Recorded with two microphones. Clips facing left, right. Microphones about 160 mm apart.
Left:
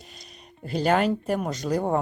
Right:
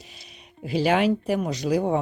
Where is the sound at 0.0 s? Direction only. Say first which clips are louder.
Left 1 dB; 5° right (ahead or behind).